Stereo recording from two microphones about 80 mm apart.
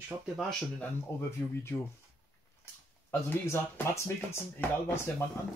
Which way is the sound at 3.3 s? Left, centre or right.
Left.